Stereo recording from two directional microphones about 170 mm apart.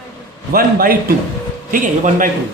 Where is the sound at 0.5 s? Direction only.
60° right (ahead or behind).